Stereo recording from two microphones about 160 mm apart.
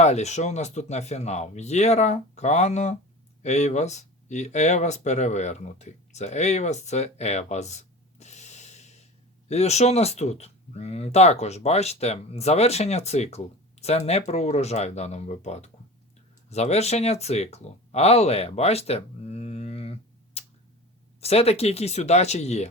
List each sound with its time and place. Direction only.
0.0 s speech: 45° left (ahead or behind)